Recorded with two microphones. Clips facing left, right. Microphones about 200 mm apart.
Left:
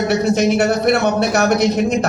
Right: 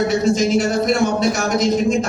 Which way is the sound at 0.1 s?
65° left (ahead or behind).